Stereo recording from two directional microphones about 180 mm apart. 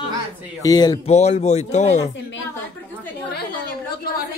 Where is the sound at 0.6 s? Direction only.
20° left (ahead or behind).